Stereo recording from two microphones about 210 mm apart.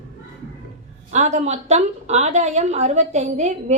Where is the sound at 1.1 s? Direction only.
35° right (ahead or behind).